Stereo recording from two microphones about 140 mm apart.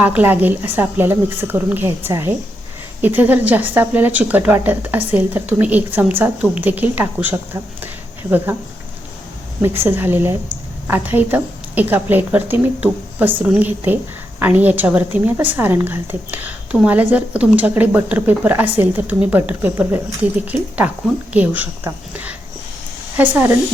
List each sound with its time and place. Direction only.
0.0 s speech: 10° right (ahead or behind)
9.6 s a woman's voice: 15° right (ahead or behind)